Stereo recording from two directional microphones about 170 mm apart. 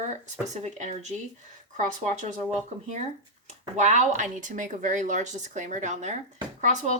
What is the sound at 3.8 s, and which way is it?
Speech, 45° right (ahead or behind).